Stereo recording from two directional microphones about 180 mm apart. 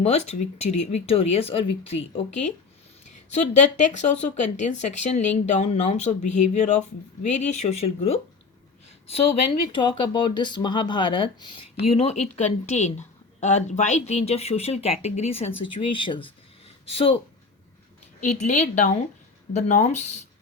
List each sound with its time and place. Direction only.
0.0 s speech: 40° left (ahead or behind)
18.2 s speech: 40° left (ahead or behind)